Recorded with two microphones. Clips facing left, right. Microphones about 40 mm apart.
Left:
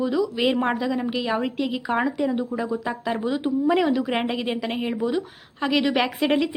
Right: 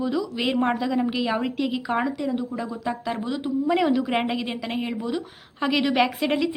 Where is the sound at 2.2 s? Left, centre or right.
Centre.